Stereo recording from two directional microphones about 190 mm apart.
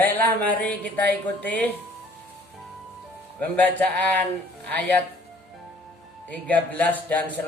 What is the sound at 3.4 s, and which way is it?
Speech, 5° left (ahead or behind).